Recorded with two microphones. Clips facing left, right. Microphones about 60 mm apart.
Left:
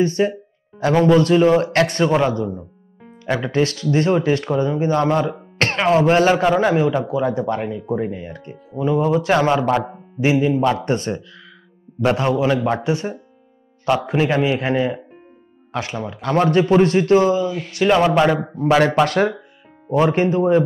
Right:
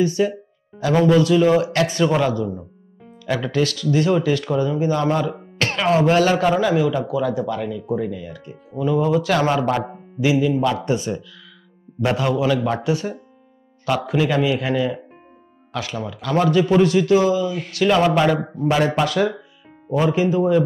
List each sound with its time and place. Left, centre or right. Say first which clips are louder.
0.0 s music: left 1 dB; left
1.0 s a man's voice: left 1 dB; left
8.7 s speech: left 1 dB; left
10.2 s a man's voice: left 2 dB; left
18.6 s speech: left 5 dB; left